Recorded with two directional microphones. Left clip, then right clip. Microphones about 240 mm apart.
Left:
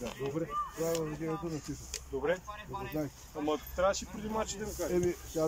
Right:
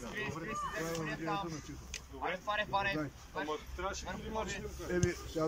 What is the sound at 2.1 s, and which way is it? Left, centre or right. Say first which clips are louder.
Speech: left 5 dB; left.